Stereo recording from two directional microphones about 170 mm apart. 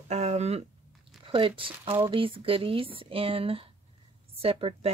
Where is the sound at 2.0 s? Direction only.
30° right (ahead or behind).